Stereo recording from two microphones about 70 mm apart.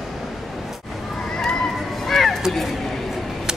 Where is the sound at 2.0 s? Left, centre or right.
Centre.